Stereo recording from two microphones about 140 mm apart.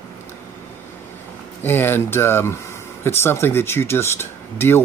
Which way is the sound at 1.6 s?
15° left (ahead or behind).